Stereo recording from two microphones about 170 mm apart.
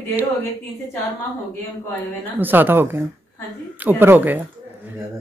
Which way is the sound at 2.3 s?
10° right (ahead or behind).